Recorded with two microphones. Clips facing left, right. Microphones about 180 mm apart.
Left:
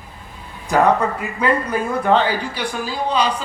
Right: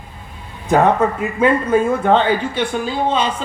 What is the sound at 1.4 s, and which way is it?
Speech, 25° right (ahead or behind).